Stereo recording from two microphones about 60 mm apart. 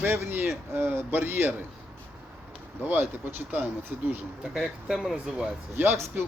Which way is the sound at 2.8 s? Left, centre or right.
Right.